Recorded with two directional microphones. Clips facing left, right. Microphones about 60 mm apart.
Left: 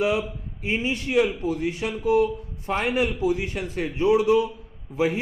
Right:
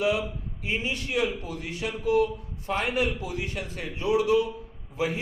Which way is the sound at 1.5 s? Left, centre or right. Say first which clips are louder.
Left 7 dB; left.